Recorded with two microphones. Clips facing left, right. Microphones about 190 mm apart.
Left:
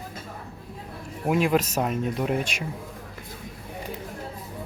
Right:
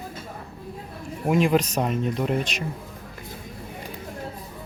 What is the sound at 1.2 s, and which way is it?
Speech, 5° left (ahead or behind).